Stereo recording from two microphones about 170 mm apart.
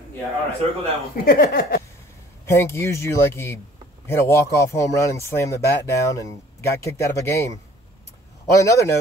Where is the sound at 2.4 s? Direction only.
15° left (ahead or behind).